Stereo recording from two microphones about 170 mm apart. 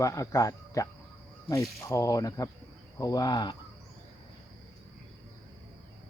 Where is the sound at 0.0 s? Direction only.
20° left (ahead or behind).